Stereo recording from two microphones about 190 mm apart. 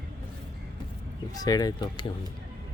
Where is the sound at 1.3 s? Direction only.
20° left (ahead or behind).